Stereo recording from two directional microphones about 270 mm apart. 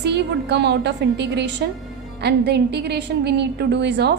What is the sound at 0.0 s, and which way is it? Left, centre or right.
A woman's voice, right.